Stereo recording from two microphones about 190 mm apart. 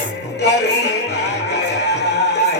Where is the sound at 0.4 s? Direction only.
60° left (ahead or behind).